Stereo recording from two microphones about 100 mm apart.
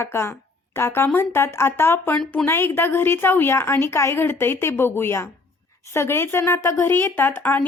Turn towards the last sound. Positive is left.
turn(degrees=20)  # may be behind; listen again after turning